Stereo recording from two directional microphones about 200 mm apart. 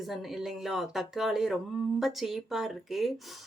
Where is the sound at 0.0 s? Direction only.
Centre (ahead or behind).